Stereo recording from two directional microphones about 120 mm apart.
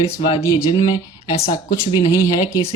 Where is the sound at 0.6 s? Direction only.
30° left (ahead or behind).